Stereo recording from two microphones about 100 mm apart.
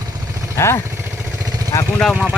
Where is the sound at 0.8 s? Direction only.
25° right (ahead or behind).